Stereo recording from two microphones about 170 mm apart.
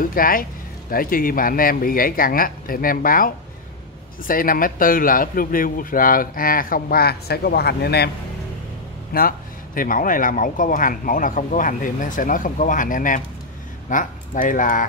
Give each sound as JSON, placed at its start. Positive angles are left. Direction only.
{"t": 0.0, "sound": "a man's voice", "side_deg": 55}
{"t": 9.1, "sound": "a man's voice", "side_deg": 60}